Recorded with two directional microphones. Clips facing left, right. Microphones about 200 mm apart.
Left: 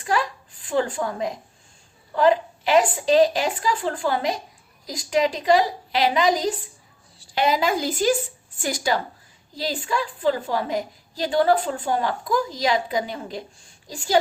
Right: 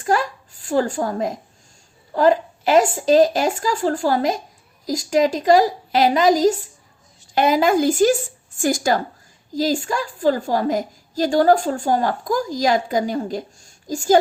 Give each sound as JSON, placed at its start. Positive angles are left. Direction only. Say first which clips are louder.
{"t": 0.0, "sound": "a woman's voice", "louder": "right 4 dB", "side_deg": -45}